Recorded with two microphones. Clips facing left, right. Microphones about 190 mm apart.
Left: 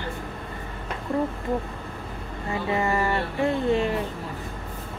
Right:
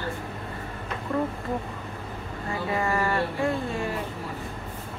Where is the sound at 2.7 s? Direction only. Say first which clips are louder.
Left 1 dB; 20° left (ahead or behind).